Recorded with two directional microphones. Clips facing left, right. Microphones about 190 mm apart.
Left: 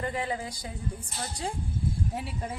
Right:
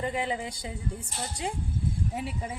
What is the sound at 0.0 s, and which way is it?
Speech, 20° right (ahead or behind).